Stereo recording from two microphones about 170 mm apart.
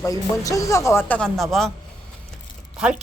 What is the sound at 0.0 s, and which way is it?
Speech, 20° left (ahead or behind).